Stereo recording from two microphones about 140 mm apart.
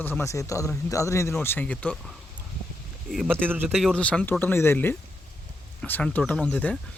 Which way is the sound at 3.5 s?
15° right (ahead or behind).